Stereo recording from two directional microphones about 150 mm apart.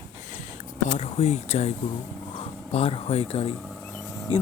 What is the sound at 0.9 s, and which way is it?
Speech, 45° left (ahead or behind).